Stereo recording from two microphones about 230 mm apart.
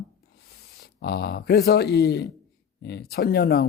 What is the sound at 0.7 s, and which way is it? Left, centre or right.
Speech, left.